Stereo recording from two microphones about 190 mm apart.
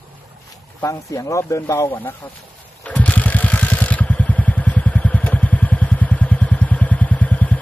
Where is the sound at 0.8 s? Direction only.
15° left (ahead or behind).